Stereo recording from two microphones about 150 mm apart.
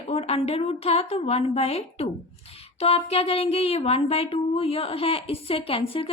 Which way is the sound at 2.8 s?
40° left (ahead or behind).